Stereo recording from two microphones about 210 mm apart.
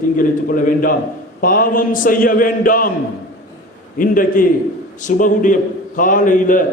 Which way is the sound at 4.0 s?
40° left (ahead or behind).